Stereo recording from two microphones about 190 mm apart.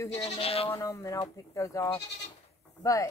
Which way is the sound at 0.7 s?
15° left (ahead or behind).